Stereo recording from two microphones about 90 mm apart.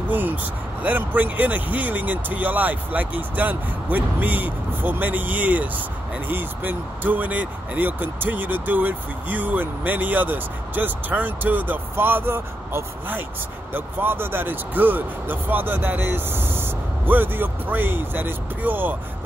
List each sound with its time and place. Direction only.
0.1 s vehicle: 20° right (ahead or behind)
0.8 s speech: 20° right (ahead or behind)